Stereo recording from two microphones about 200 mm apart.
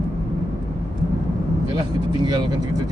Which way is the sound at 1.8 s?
20° right (ahead or behind).